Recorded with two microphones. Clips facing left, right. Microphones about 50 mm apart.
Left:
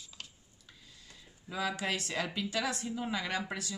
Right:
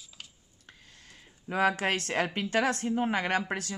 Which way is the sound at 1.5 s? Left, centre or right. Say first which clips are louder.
Right 8 dB; right.